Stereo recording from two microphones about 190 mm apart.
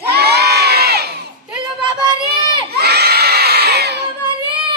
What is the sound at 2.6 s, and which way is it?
Children shouting, 55° right (ahead or behind).